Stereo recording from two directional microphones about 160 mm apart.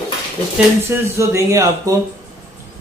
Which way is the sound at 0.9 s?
20° right (ahead or behind).